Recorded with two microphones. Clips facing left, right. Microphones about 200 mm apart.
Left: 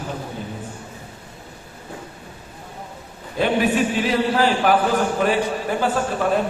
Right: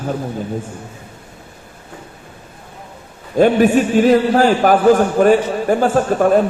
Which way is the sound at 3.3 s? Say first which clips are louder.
Right 8 dB; 45° right (ahead or behind).